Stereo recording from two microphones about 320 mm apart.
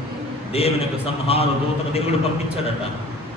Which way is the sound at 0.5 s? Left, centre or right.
Centre.